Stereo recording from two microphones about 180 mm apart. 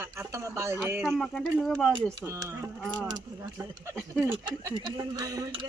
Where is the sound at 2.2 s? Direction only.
15° right (ahead or behind).